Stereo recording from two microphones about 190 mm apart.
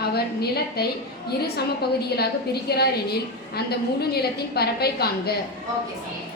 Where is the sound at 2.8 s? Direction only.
55° left (ahead or behind).